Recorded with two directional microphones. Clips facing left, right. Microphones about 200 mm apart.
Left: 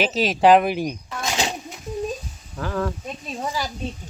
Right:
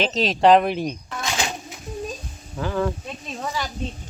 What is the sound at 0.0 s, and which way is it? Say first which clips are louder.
Speech: even; 5° left (ahead or behind).